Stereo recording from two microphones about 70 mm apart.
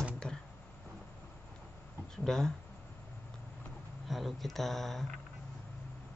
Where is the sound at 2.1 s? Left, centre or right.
Centre.